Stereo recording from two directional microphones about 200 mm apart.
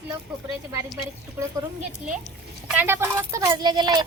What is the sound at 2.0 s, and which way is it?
A child's voice, 5° right (ahead or behind).